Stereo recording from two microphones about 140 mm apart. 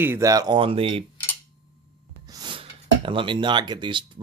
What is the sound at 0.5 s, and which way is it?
Speech, 40° right (ahead or behind).